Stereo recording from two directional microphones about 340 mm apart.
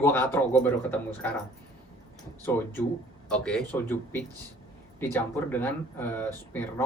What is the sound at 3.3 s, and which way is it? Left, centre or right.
A man's voice, centre.